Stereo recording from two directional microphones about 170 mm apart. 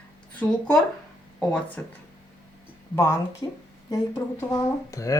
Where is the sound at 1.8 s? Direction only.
10° left (ahead or behind).